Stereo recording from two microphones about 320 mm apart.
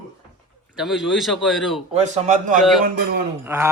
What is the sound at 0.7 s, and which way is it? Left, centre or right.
Speech, centre.